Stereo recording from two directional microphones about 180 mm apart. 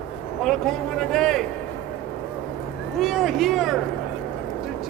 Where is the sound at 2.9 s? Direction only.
Centre (ahead or behind).